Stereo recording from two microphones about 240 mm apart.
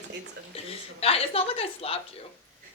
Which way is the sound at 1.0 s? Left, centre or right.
Left.